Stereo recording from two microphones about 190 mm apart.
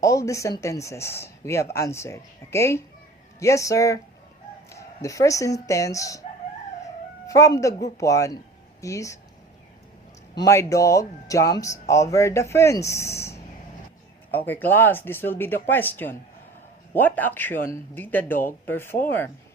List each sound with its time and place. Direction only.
0.0 s speech: 15° left (ahead or behind)
7.3 s speech: 15° left (ahead or behind)
10.3 s speech: 15° left (ahead or behind)